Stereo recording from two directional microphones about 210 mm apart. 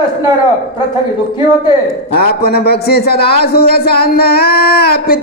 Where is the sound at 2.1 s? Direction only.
50° left (ahead or behind).